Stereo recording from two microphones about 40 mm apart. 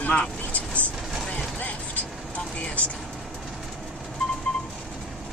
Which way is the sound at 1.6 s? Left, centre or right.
Left.